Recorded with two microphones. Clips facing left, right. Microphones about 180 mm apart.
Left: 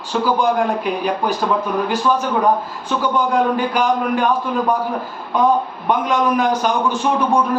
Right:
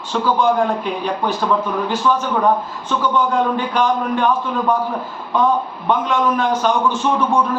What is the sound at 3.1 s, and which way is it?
A man's voice, 10° left (ahead or behind).